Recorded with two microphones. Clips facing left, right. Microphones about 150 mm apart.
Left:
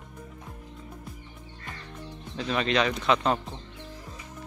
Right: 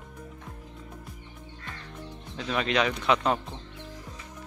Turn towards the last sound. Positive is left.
turn(degrees=-10)  # may be behind; listen again after turning